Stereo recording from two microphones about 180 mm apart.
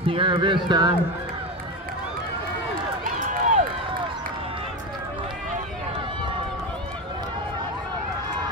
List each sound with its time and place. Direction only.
0.0 s speech: 30° right (ahead or behind)
3.3 s run: 45° right (ahead or behind)